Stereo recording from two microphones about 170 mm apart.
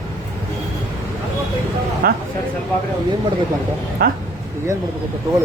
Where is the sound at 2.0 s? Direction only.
60° right (ahead or behind).